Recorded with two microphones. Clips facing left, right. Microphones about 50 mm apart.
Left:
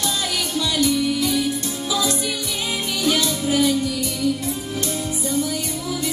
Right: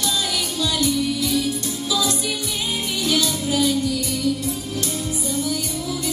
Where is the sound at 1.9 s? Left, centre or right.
Left.